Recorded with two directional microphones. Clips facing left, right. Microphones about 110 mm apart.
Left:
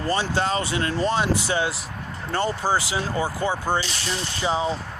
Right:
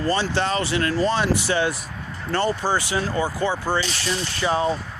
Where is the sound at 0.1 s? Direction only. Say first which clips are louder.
Even; 15° left (ahead or behind).